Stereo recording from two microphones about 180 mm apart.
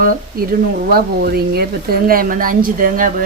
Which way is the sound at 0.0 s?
50° right (ahead or behind).